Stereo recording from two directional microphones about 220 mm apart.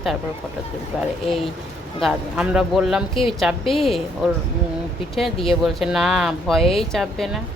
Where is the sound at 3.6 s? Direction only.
25° left (ahead or behind).